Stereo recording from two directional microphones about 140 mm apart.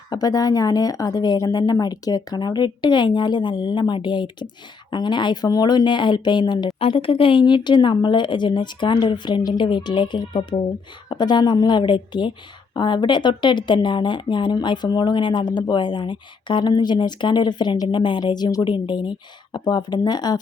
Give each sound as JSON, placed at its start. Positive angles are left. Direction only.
{"t": 0.1, "sound": "a woman's voice", "side_deg": 25}